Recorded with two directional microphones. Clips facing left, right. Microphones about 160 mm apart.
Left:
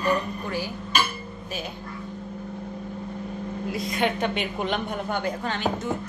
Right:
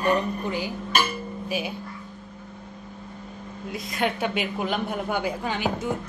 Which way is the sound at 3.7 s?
Centre (ahead or behind).